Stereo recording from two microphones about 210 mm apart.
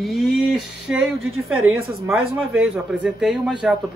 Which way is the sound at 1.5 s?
85° right.